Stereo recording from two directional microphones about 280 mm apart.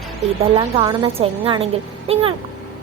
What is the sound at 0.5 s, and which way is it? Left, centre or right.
Speech, centre.